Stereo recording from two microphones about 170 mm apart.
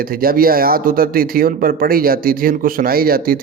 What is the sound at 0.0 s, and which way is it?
Speech, 60° right (ahead or behind).